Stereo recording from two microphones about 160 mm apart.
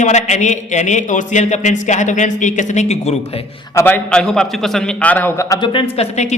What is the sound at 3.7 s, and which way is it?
A man's voice, 10° left (ahead or behind).